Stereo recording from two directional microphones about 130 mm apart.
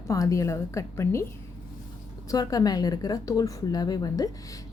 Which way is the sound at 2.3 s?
30° left (ahead or behind).